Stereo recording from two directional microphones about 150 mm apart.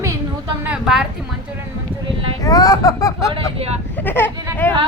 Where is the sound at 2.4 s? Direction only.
25° left (ahead or behind).